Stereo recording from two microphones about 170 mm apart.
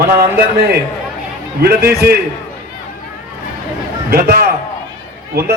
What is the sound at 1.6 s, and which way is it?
Speech, 65° right (ahead or behind).